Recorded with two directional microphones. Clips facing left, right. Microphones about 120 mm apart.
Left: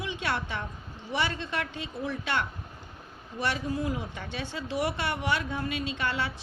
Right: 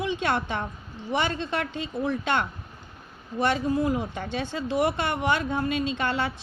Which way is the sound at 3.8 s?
40° right (ahead or behind).